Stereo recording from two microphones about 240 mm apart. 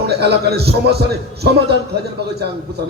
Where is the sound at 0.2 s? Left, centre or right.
Right.